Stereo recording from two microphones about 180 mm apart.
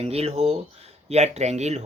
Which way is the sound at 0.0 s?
35° right (ahead or behind).